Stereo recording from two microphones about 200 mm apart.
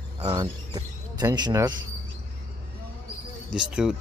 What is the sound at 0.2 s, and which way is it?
Speech, 20° right (ahead or behind).